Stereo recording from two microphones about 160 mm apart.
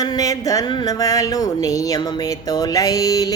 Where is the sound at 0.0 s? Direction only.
25° left (ahead or behind).